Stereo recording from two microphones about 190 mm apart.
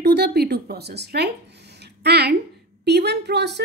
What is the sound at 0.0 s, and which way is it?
A woman's voice, 60° right (ahead or behind).